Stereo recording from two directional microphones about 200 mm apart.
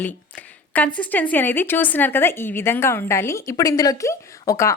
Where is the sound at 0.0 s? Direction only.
10° left (ahead or behind).